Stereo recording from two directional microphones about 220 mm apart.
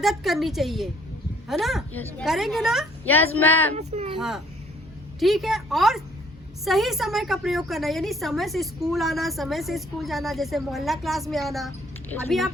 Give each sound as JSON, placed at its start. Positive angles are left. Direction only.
{"t": 0.0, "sound": "a woman's voice", "side_deg": 0}
{"t": 3.8, "sound": "speech", "side_deg": -30}
{"t": 4.2, "sound": "a woman's voice", "side_deg": 0}